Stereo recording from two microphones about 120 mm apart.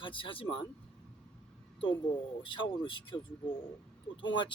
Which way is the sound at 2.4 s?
45° left (ahead or behind).